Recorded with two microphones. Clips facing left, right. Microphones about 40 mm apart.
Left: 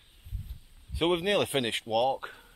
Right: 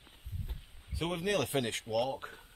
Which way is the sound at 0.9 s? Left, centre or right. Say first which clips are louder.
Left 7 dB; left.